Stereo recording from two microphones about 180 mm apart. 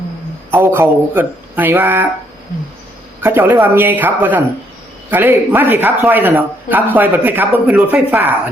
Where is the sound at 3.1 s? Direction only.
10° right (ahead or behind).